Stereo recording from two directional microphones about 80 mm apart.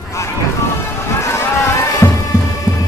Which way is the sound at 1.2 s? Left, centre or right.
Left.